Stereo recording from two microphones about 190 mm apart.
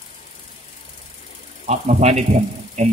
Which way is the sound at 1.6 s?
35° right (ahead or behind).